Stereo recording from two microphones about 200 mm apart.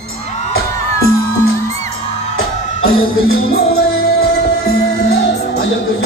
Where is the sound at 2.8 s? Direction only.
50° left (ahead or behind).